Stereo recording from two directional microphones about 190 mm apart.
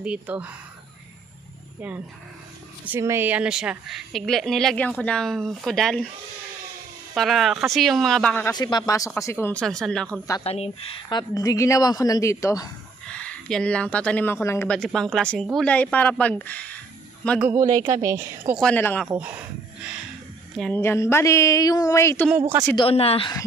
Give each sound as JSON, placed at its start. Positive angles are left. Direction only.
{"t": 0.0, "sound": "a woman's voice", "side_deg": -5}
{"t": 2.8, "sound": "a woman's voice", "side_deg": -10}
{"t": 7.2, "sound": "a woman's voice", "side_deg": 0}
{"t": 8.5, "sound": "a woman's voice", "side_deg": 20}
{"t": 10.4, "sound": "a woman's voice", "side_deg": 30}
{"t": 14.8, "sound": "speech", "side_deg": 0}
{"t": 17.4, "sound": "a woman's voice", "side_deg": -15}
{"t": 18.6, "sound": "a woman's voice", "side_deg": 5}
{"t": 19.1, "sound": "speech", "side_deg": -5}
{"t": 20.5, "sound": "speech", "side_deg": 5}
{"t": 22.4, "sound": "a woman's voice", "side_deg": -15}
{"t": 22.8, "sound": "a woman's voice", "side_deg": 30}